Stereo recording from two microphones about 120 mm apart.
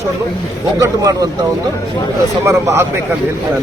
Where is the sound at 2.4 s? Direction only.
20° right (ahead or behind).